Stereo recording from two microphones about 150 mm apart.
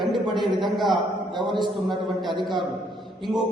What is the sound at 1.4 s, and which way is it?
Speech, 30° right (ahead or behind).